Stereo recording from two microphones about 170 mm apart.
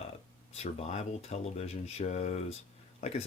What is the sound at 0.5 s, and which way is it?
Speech, 40° left (ahead or behind).